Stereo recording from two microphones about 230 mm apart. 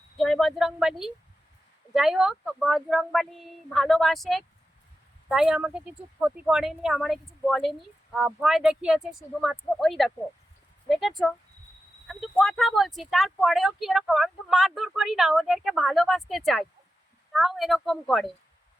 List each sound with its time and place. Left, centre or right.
0.2 s speech: centre